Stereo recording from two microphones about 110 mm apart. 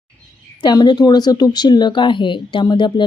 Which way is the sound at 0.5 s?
40° left (ahead or behind).